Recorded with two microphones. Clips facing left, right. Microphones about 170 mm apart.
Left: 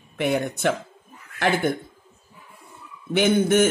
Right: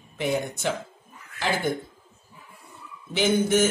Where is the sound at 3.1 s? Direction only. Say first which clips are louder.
Left 3 dB; 55° left (ahead or behind).